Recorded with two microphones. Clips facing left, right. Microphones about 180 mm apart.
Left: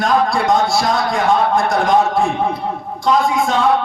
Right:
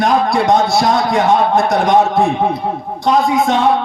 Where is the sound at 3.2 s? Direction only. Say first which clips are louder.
Right 3 dB; 20° right (ahead or behind).